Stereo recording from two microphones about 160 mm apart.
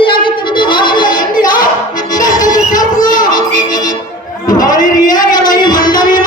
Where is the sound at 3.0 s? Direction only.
55° left (ahead or behind).